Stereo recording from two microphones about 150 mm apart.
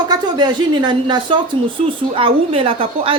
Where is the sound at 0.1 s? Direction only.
30° right (ahead or behind).